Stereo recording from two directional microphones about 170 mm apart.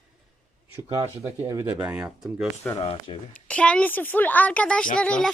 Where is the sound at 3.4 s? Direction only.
5° left (ahead or behind).